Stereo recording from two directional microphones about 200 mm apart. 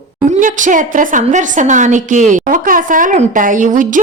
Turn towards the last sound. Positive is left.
turn(degrees=-40)  # may be behind; listen again after turning